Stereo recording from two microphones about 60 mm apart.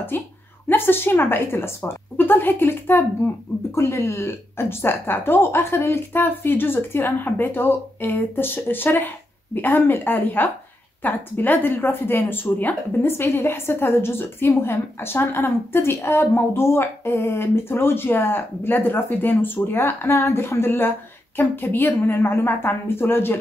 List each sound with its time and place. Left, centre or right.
0.1 s a woman's voice: left